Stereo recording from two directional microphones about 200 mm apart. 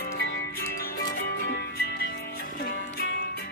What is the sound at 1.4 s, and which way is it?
Music, 50° left (ahead or behind).